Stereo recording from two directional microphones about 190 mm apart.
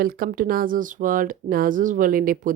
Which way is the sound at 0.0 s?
50° right (ahead or behind).